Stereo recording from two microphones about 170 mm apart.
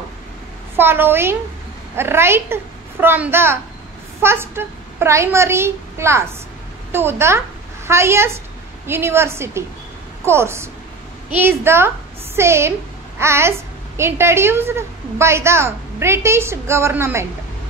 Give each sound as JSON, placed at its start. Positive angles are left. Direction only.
{"t": 0.7, "sound": "a woman's voice", "side_deg": -10}